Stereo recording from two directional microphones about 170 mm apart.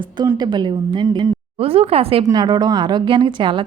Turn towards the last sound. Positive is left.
turn(degrees=-30)  # may be behind; listen again after turning